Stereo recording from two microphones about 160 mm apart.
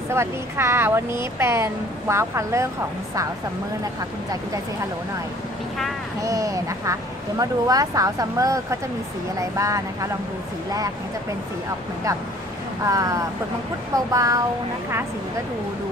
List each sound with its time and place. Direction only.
0.1 s speech: 15° right (ahead or behind)
6.2 s speech: 20° right (ahead or behind)
12.8 s speech: 20° right (ahead or behind)